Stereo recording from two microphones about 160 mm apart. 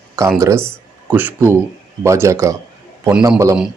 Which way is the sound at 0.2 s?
15° right (ahead or behind).